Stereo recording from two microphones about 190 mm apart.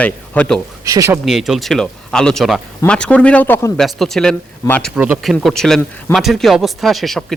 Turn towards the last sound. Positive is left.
turn(degrees=0)  # may be behind; listen again after turning